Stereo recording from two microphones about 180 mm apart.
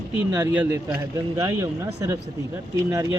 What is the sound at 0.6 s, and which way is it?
Speech, 5° right (ahead or behind).